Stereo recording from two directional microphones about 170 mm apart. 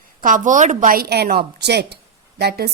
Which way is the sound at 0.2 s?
50° right (ahead or behind).